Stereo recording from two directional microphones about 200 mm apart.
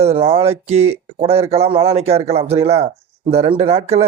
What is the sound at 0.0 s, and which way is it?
Speech, 30° right (ahead or behind).